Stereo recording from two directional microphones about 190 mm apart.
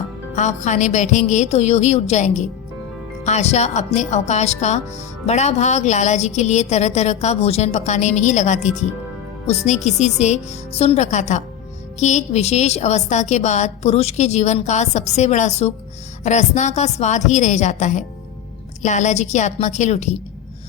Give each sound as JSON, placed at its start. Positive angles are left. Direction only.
{"t": 0.3, "sound": "a woman's voice", "side_deg": 40}